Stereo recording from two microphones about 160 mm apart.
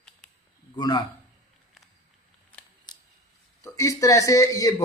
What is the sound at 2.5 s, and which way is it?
Camera, 10° left (ahead or behind).